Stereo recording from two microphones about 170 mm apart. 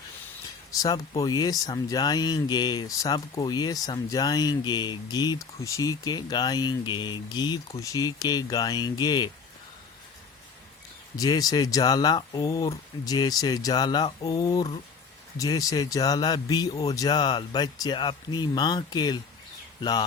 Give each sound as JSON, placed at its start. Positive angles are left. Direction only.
{"t": 0.8, "sound": "speech", "side_deg": 20}
{"t": 11.2, "sound": "speech", "side_deg": 20}